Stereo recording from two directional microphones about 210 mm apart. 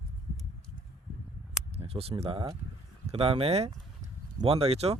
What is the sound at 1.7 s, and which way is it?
Speech, 30° right (ahead or behind).